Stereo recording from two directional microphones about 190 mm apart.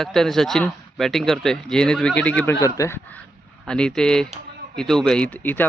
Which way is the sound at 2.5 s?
15° left (ahead or behind).